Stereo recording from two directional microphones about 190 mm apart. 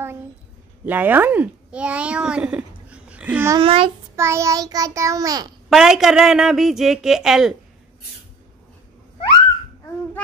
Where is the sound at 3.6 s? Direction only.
30° right (ahead or behind).